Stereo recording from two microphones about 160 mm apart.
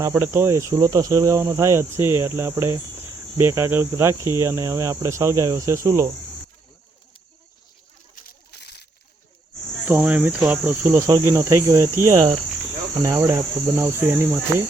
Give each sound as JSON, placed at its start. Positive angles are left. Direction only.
{"t": 0.1, "sound": "cricket", "side_deg": -15}
{"t": 8.1, "sound": "a sound", "side_deg": 70}
{"t": 9.8, "sound": "cricket", "side_deg": -10}